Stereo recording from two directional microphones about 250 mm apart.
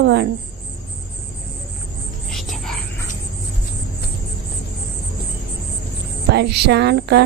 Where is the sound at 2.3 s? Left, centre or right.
Centre.